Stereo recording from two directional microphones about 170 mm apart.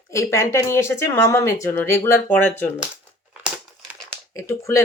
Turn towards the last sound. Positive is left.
turn(degrees=15)  # may be behind; listen again after turning